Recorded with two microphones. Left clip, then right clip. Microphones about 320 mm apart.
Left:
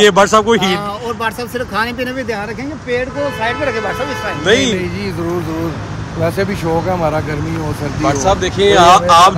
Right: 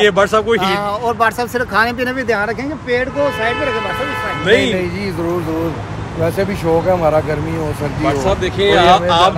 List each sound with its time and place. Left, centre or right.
0.0 s speech: left
0.6 s speech: centre
4.5 s speech: centre
6.2 s speech: centre
8.2 s speech: centre